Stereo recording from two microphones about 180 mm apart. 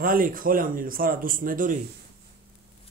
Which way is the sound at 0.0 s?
50° right (ahead or behind).